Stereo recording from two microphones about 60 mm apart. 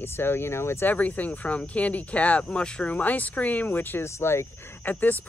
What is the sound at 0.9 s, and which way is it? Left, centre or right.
Speech, left.